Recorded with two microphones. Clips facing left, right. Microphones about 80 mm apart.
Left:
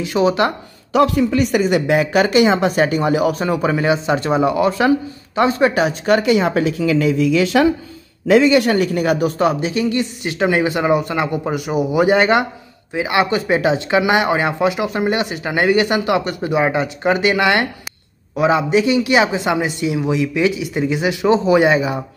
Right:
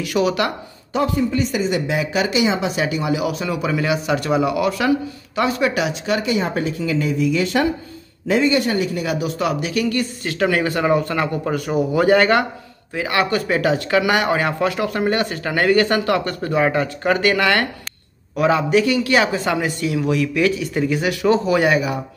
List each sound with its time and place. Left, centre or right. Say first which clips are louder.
0.0 s speech: left 3 dB; left
0.9 s speech: left 5 dB; left
6.2 s speech: left 5 dB; left